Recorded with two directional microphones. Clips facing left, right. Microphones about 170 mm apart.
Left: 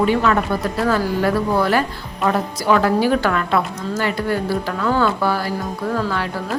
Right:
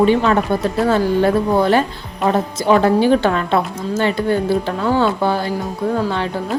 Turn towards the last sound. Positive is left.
turn(degrees=-25)  # may be behind; listen again after turning